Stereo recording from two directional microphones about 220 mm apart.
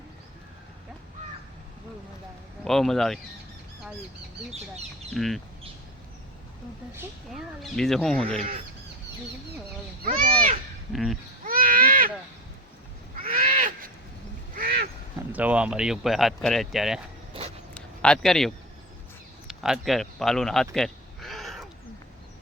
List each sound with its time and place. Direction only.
2.6 s speech: centre (ahead or behind)
5.1 s speech: centre (ahead or behind)
6.9 s speech: centre (ahead or behind)
10.9 s speech: centre (ahead or behind)
11.4 s a sound: 40° right (ahead or behind)
13.1 s crow: 40° right (ahead or behind)
14.5 s a sound: 40° right (ahead or behind)
15.3 s speech: 5° right (ahead or behind)
17.3 s a sound: 25° right (ahead or behind)
17.7 s a sound: 5° left (ahead or behind)
19.5 s speech: centre (ahead or behind)
20.7 s bleat: centre (ahead or behind)